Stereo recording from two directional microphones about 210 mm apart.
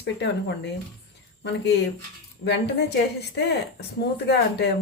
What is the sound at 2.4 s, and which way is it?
Speech, 55° left (ahead or behind).